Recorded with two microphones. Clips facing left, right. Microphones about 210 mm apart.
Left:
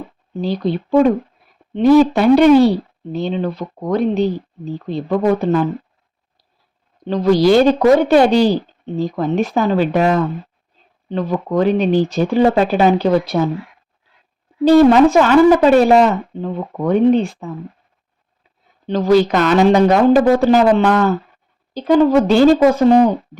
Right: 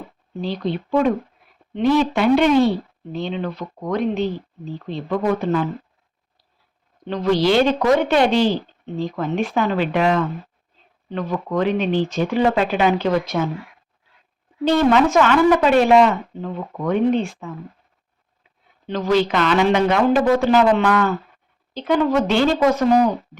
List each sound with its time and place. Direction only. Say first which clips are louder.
0.4 s speech: left 5 dB; 40° left (ahead or behind)
7.0 s speech: left 5 dB; 35° left (ahead or behind)
14.6 s speech: left 7 dB; 40° left (ahead or behind)
18.9 s speech: left 6 dB; 35° left (ahead or behind)